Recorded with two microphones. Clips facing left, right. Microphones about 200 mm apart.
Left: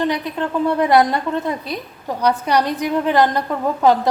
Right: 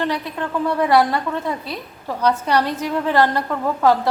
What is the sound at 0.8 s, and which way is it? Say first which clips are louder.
A woman's voice: left 1 dB; 20° left (ahead or behind).